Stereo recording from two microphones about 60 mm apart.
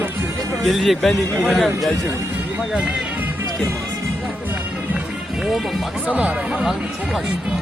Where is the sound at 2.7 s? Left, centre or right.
Centre.